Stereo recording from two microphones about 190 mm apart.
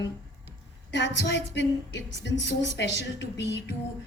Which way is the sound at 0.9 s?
65° left (ahead or behind).